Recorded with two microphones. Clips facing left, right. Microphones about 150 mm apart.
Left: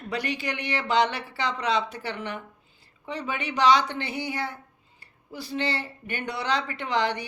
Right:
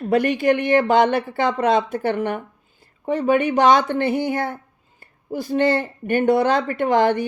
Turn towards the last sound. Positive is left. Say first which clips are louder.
# right 9 dB
turn(degrees=-50)  # may be behind; listen again after turning